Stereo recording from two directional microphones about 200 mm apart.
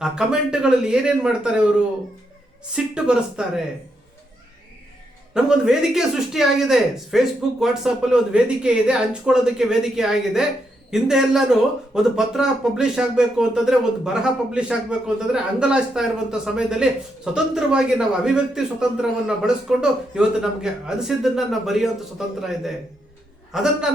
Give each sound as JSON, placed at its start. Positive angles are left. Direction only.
{"t": 0.0, "sound": "speech", "side_deg": -5}
{"t": 2.7, "sound": "speech", "side_deg": -5}
{"t": 5.3, "sound": "speech", "side_deg": 0}